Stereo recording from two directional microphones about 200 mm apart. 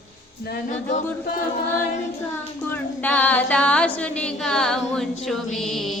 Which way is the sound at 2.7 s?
10° left (ahead or behind).